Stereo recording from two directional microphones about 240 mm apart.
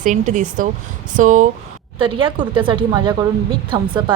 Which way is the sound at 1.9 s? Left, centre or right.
Right.